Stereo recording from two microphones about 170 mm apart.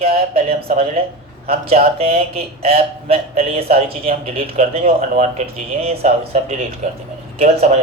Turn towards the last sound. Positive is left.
turn(degrees=-35)  # may be behind; listen again after turning